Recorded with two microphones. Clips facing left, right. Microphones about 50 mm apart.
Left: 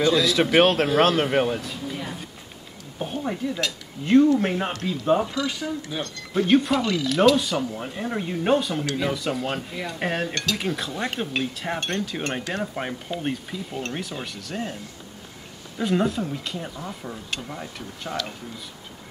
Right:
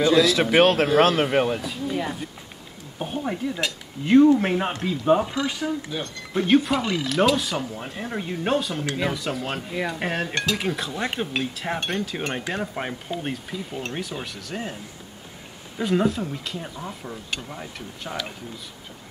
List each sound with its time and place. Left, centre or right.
0.0 s speech: centre
3.0 s speech: centre
6.3 s speech: centre
6.8 s speech: centre
7.1 s speech: centre
9.7 s speech: centre
10.3 s speech: centre
10.6 s speech: centre
15.8 s speech: centre